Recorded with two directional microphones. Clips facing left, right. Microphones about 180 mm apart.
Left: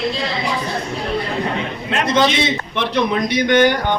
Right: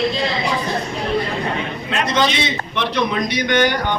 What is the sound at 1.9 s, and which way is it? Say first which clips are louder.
A man's voice: left 3 dB; 55° left (ahead or behind).